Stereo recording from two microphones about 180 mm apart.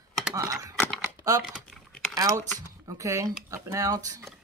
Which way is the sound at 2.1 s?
20° right (ahead or behind).